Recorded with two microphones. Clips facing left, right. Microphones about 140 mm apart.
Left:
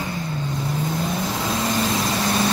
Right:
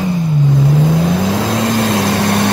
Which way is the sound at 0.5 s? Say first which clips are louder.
Right 11 dB; 80° right.